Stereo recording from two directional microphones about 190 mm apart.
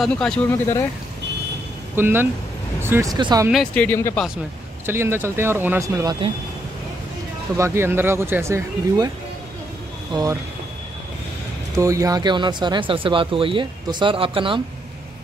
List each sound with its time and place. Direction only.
0.0 s speech: 5° left (ahead or behind)
0.5 s speech: 15° left (ahead or behind)
2.0 s speech: 10° right (ahead or behind)
3.7 s speech: 10° left (ahead or behind)
4.8 s speech: 10° right (ahead or behind)
7.5 s speech: 15° right (ahead or behind)
10.1 s speech: 20° right (ahead or behind)
11.7 s speech: 15° right (ahead or behind)